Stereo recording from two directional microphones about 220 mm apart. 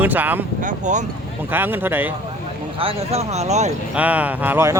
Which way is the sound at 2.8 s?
25° right (ahead or behind).